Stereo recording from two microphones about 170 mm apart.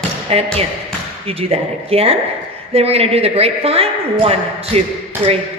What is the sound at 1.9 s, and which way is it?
A man's voice, 35° right (ahead or behind).